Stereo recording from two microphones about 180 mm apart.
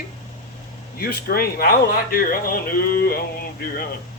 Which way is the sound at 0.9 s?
55° left (ahead or behind).